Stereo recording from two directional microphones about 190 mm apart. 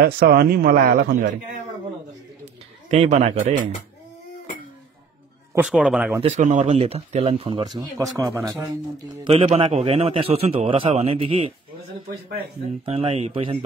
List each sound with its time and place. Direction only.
0.0 s a man's voice: 55° right (ahead or behind)
2.9 s speech: 35° right (ahead or behind)
5.5 s a man's voice: 5° right (ahead or behind)
6.2 s speech: 40° right (ahead or behind)
12.8 s speech: 30° right (ahead or behind)